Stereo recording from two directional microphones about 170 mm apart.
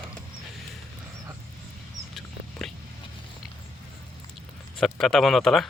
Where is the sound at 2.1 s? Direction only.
Centre (ahead or behind).